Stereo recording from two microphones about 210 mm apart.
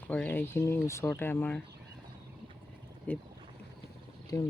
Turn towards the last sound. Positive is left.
turn(degrees=10)  # may be behind; listen again after turning